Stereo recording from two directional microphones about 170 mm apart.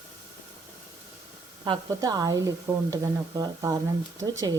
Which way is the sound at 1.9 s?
20° right (ahead or behind).